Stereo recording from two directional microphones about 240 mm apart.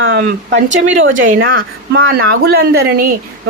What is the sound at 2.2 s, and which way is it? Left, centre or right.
Speech, right.